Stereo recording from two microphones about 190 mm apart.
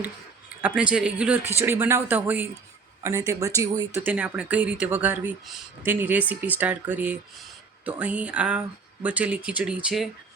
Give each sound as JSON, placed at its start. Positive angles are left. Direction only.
{"t": 0.6, "sound": "a man's voice", "side_deg": -5}